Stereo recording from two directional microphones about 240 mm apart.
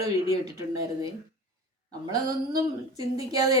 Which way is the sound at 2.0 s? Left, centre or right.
Centre.